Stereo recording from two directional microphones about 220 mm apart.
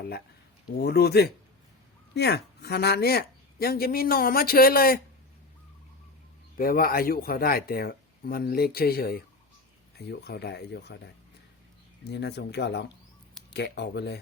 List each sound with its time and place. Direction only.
0.8 s speech: 45° left (ahead or behind)
6.6 s speech: 40° left (ahead or behind)
12.1 s speech: 50° left (ahead or behind)